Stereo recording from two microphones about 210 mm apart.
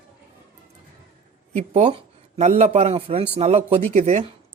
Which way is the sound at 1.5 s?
30° right (ahead or behind).